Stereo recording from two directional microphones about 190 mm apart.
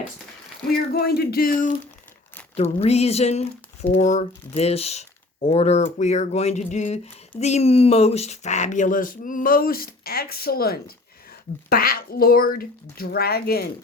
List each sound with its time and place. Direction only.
0.9 s speech: 55° left (ahead or behind)
2.6 s speech: 35° left (ahead or behind); by 13.7 s 55° left (ahead or behind)